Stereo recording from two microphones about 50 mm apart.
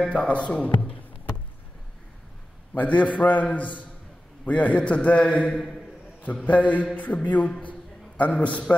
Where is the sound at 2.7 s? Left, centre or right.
Left; by 5.8 s centre.